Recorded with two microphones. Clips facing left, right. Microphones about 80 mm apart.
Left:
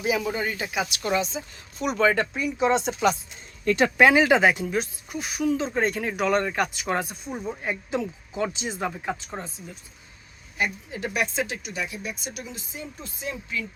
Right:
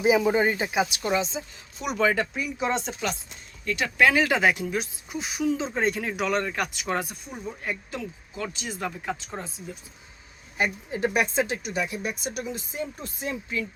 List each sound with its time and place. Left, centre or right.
0.0 s speech: right; by 2.9 s centre
3.6 s speech: left
3.9 s speech: left
4.2 s speech: centre
5.1 s speech: centre
5.7 s speech: centre
6.2 s speech: centre
7.3 s speech: left
7.6 s speech: centre
7.9 s speech: left
8.8 s speech: centre
10.6 s speech: right